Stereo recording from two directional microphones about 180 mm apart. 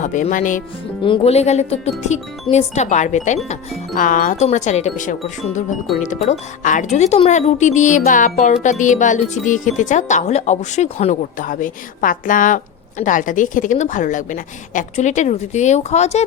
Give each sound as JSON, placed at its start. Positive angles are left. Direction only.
{"t": 0.0, "sound": "speech", "side_deg": 45}
{"t": 1.0, "sound": "speech", "side_deg": 30}